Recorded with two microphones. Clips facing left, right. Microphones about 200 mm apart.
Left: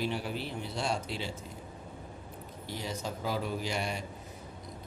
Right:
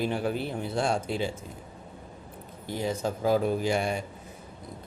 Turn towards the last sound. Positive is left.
turn(degrees=-50)  # may be behind; listen again after turning